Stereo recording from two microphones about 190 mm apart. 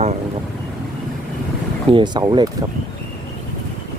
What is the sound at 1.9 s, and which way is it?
Speech, 25° right (ahead or behind).